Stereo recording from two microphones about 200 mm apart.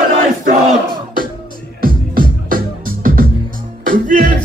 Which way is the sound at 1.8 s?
45° right (ahead or behind).